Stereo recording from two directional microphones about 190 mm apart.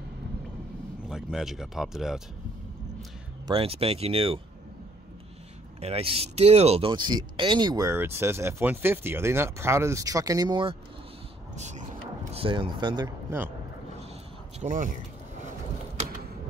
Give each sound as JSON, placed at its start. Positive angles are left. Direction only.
{"t": 1.0, "sound": "speech", "side_deg": 0}
{"t": 3.4, "sound": "speech", "side_deg": -30}
{"t": 5.8, "sound": "speech", "side_deg": -30}
{"t": 11.5, "sound": "vehicle", "side_deg": -35}
{"t": 12.3, "sound": "speech", "side_deg": -30}
{"t": 14.6, "sound": "speech", "side_deg": -40}